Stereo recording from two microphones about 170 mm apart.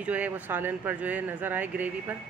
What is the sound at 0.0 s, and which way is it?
Speech, 10° right (ahead or behind).